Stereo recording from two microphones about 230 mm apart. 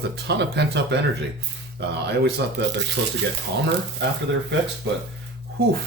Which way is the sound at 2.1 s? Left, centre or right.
Right.